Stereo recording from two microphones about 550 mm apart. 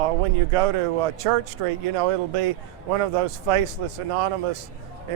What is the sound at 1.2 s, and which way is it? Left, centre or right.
Speech, right.